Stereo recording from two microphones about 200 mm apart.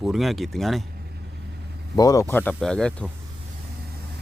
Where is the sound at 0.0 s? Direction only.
Centre (ahead or behind).